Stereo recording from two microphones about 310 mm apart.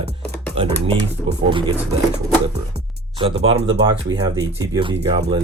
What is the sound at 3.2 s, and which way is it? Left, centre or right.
Speech, centre.